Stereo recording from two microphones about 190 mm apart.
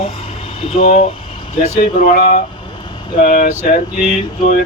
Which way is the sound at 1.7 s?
45° left (ahead or behind).